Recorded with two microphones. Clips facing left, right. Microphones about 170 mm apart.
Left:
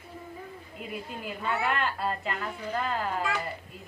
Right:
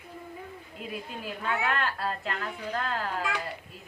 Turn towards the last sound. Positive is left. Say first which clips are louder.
# left 1 dB
turn(degrees=0)  # may be behind; listen again after turning